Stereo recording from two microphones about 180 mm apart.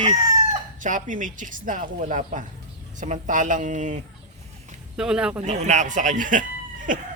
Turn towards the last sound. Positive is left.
turn(degrees=-45)  # may be behind; listen again after turning